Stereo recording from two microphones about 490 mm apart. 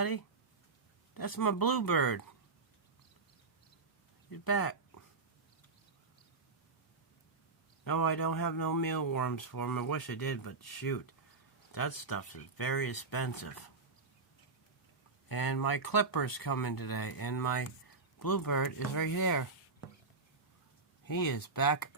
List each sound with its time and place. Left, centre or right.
1.1 s speech: left
4.3 s a sound: left
7.9 s speech: left
15.3 s speech: left